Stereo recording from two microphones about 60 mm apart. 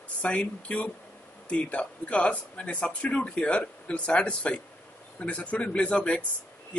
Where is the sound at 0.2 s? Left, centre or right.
Left.